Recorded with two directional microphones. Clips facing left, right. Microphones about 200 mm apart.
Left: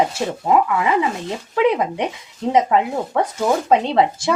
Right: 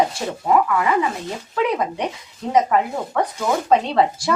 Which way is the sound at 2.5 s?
25° left (ahead or behind).